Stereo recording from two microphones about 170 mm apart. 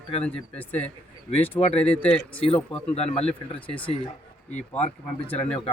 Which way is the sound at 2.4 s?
35° left (ahead or behind).